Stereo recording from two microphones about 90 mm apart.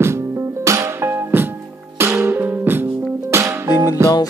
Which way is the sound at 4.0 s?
35° right (ahead or behind).